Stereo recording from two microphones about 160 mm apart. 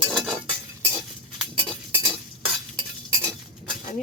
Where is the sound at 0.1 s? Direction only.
5° left (ahead or behind).